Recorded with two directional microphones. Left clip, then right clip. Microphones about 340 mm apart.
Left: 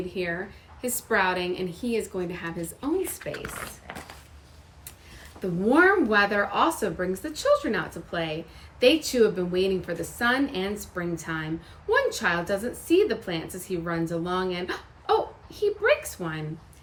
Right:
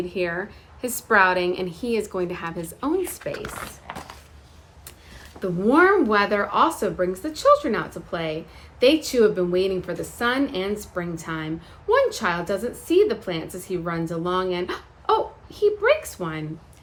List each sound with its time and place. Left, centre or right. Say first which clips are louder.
0.1 s a woman's voice: right 4 dB; centre
3.3 s speech: right 3 dB; centre
5.4 s a woman's voice: right 3 dB; centre